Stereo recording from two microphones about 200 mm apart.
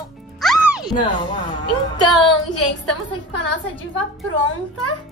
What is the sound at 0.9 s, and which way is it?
Music, 25° left (ahead or behind).